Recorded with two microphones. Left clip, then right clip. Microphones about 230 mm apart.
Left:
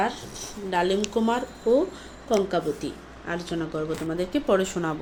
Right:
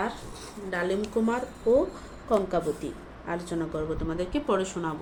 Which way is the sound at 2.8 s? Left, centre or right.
Left.